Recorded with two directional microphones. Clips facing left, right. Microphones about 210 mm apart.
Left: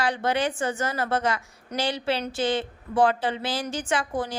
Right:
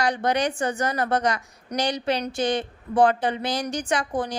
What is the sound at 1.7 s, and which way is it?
A woman's voice, 15° right (ahead or behind).